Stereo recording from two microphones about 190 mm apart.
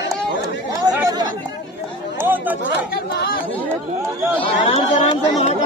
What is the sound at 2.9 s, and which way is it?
Speech, 55° left (ahead or behind).